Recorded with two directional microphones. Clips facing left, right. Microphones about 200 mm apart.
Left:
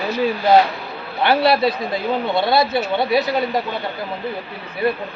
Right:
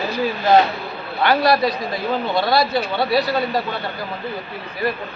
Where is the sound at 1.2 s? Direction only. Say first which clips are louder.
Left 1 dB; 25° left (ahead or behind).